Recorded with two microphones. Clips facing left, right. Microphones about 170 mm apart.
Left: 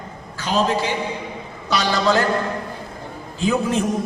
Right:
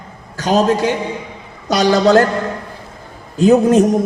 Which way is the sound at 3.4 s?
45° right (ahead or behind).